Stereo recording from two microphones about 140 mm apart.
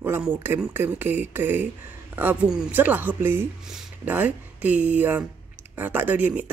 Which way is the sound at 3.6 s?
5° right (ahead or behind).